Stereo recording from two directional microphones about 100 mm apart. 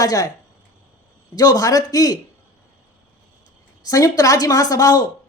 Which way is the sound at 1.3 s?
35° left (ahead or behind).